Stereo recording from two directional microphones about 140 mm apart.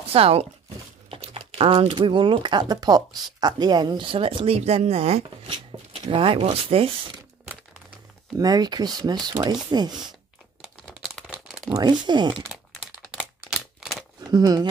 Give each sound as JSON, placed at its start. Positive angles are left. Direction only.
{"t": 0.1, "sound": "speech", "side_deg": -45}
{"t": 8.4, "sound": "speech", "side_deg": -30}
{"t": 10.9, "sound": "crumpling", "side_deg": 5}
{"t": 11.7, "sound": "speech", "side_deg": -30}
{"t": 13.5, "sound": "a sound", "side_deg": 0}
{"t": 14.3, "sound": "speech", "side_deg": -30}